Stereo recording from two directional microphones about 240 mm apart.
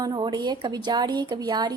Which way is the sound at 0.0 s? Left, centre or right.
Centre.